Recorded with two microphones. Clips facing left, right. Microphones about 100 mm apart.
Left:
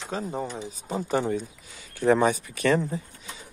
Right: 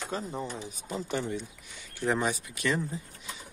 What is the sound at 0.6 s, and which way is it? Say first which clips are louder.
Speech: left 5 dB; 30° left (ahead or behind).